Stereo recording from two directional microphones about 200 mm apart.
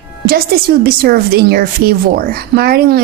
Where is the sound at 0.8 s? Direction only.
50° right (ahead or behind).